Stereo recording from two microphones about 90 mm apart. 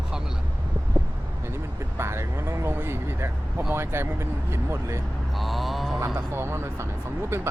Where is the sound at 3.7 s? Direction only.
25° right (ahead or behind).